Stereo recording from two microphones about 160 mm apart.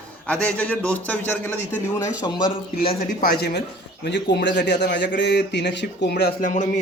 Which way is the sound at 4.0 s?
90° left.